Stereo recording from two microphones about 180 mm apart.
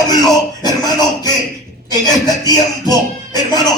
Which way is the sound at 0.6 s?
20° left (ahead or behind).